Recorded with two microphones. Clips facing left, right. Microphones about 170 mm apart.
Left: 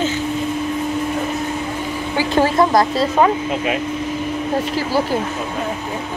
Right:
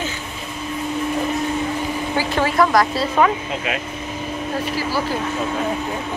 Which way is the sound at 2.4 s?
25° left (ahead or behind).